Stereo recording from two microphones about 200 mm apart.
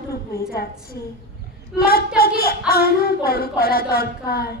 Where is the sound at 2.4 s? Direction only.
50° left (ahead or behind).